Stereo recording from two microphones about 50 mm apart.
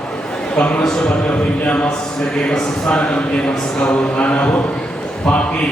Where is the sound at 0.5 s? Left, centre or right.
Left.